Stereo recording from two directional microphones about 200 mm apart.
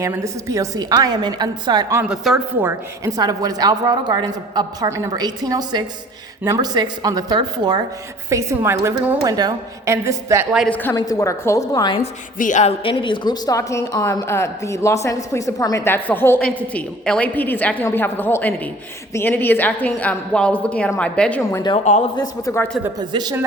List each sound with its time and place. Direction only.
0.0 s a woman's voice: 15° right (ahead or behind)
2.0 s a woman's voice: centre (ahead or behind)
2.6 s a woman's voice: 10° right (ahead or behind)
10.5 s a woman's voice: centre (ahead or behind)
10.8 s a woman's voice: 15° left (ahead or behind)
12.4 s a woman's voice: 40° left (ahead or behind); by 21.6 s 5° left (ahead or behind)
21.9 s speech: 35° left (ahead or behind)
22.2 s a woman's voice: 15° left (ahead or behind)
23.0 s a woman's voice: 20° right (ahead or behind)